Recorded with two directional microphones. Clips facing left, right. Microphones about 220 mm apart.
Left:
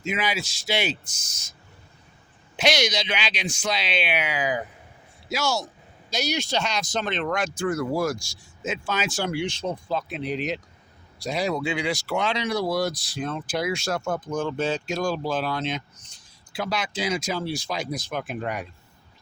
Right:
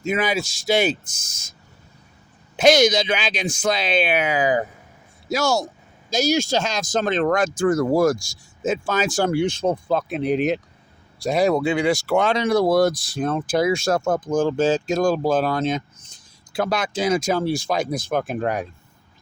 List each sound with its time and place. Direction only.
0.0 s speech: 50° right (ahead or behind)
2.6 s speech: 50° right (ahead or behind)